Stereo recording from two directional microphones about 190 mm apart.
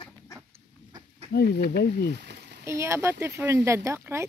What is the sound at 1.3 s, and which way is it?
Speech, 55° left (ahead or behind).